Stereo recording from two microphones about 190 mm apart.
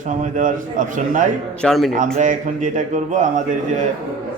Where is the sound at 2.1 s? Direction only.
40° right (ahead or behind).